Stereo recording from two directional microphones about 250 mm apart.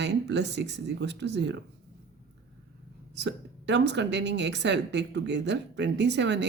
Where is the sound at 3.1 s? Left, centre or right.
Right.